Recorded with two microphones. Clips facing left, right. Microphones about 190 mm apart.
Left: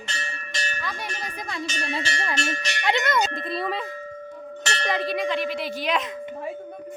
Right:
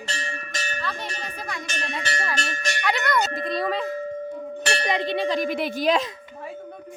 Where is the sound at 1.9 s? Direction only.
25° left (ahead or behind).